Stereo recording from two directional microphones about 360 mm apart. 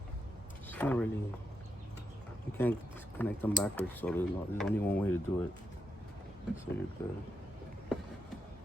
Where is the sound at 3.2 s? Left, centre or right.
Centre.